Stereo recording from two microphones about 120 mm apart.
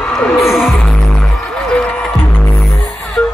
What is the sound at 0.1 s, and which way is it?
Music, centre (ahead or behind).